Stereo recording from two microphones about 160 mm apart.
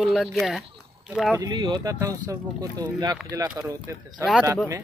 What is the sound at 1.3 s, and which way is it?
Speech, 25° right (ahead or behind).